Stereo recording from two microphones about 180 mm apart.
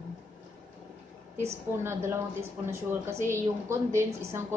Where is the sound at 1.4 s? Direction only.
15° right (ahead or behind).